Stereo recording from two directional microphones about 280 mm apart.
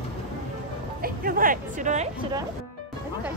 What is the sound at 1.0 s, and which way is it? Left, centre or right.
Hubbub, right.